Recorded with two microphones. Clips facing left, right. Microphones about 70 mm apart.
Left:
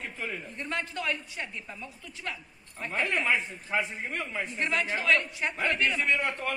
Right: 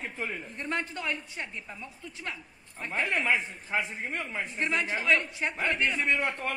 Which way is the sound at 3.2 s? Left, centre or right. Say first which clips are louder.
Even; centre.